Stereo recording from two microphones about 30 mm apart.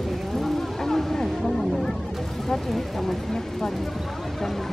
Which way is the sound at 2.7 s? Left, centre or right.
Centre.